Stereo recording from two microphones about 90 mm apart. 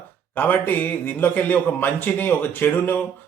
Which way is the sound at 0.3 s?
20° left (ahead or behind).